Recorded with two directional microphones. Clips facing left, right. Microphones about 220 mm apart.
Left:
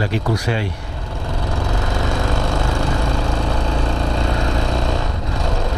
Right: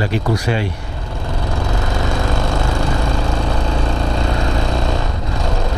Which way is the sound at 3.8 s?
15° right (ahead or behind).